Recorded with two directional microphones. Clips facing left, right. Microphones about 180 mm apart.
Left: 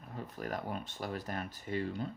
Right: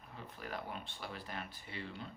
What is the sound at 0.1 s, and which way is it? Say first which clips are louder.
Speech: left 6 dB; 45° left (ahead or behind).